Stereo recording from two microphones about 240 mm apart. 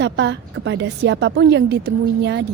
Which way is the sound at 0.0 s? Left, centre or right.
Right.